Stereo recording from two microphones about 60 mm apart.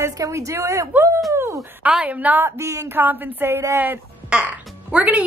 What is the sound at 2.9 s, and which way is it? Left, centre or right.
Speech, right.